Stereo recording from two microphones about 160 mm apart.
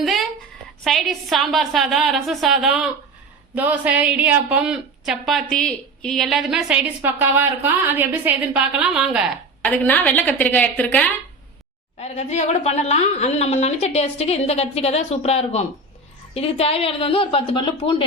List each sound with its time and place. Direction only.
0.0 s a sound: centre (ahead or behind)
0.9 s a woman's voice: centre (ahead or behind)
9.6 s a woman's voice: 10° left (ahead or behind)
11.9 s a woman's voice: 40° left (ahead or behind)